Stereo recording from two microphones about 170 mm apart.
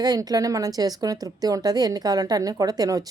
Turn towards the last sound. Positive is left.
turn(degrees=-20)  # may be behind; listen again after turning